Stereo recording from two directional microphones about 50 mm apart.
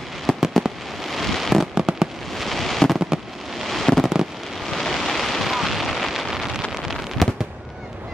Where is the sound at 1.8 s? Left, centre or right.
Centre.